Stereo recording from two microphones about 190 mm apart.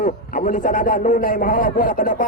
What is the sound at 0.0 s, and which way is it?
A man's voice, 40° left (ahead or behind).